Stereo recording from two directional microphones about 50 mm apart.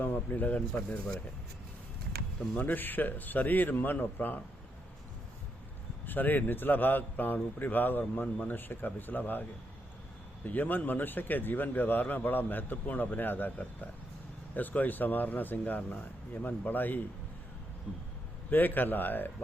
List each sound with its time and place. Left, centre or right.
0.0 s speech: left
2.6 s speech: left
6.1 s speech: left
10.4 s speech: left
18.5 s speech: left